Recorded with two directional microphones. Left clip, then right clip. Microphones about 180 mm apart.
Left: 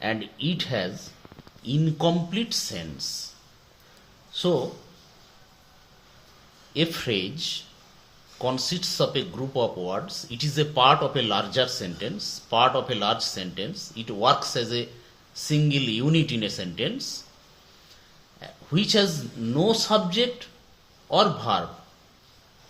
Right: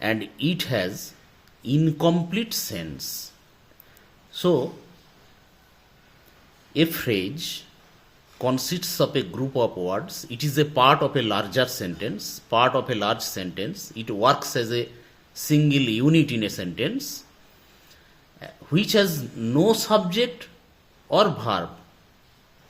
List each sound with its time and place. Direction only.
0.0 s speech: 60° right (ahead or behind)
6.7 s speech: 60° right (ahead or behind)
18.3 s speech: 60° right (ahead or behind)